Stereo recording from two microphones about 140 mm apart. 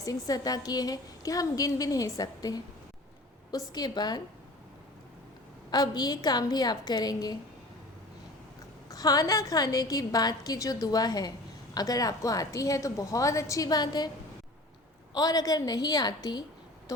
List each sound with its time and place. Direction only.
0.0 s a woman's voice: 25° left (ahead or behind)
3.7 s a woman's voice: 30° left (ahead or behind)
5.7 s a woman's voice: 30° left (ahead or behind)
8.9 s a woman's voice: 25° left (ahead or behind)
15.1 s a woman's voice: 25° left (ahead or behind)